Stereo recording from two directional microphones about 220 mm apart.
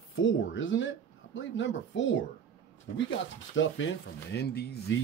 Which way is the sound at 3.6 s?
60° left (ahead or behind).